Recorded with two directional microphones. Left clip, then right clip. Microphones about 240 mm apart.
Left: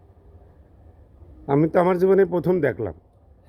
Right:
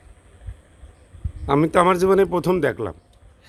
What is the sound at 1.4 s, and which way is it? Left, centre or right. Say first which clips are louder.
Speech: right 2 dB; centre.